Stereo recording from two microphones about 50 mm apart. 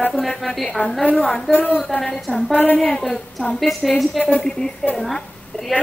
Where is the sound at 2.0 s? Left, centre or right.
Centre.